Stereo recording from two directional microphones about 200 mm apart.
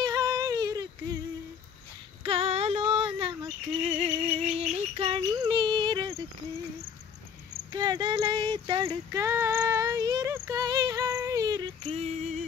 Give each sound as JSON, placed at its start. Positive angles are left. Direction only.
{"t": 0.0, "sound": "yodeling", "side_deg": -20}
{"t": 2.2, "sound": "female singing", "side_deg": -30}
{"t": 4.0, "sound": "music", "side_deg": -30}
{"t": 7.7, "sound": "a sound", "side_deg": -20}